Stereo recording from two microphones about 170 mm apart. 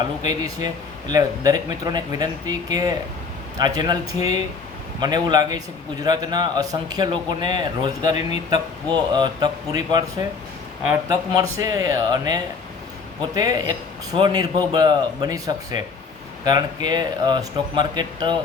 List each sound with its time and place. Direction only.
0.2 s a man's voice: 20° right (ahead or behind)